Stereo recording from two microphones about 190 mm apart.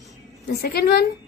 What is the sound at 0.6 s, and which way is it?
Speech, 55° left (ahead or behind).